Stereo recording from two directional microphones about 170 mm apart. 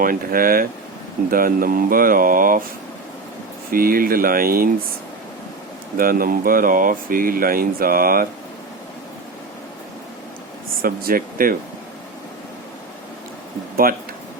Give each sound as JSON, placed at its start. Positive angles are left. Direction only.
{"t": 0.0, "sound": "speech", "side_deg": -55}
{"t": 3.7, "sound": "speech", "side_deg": -60}
{"t": 6.0, "sound": "speech", "side_deg": -60}
{"t": 10.8, "sound": "speech", "side_deg": -60}
{"t": 13.8, "sound": "speech", "side_deg": -60}